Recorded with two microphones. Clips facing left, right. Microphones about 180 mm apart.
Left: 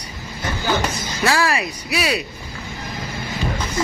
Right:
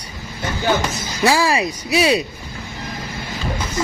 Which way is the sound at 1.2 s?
15° right (ahead or behind).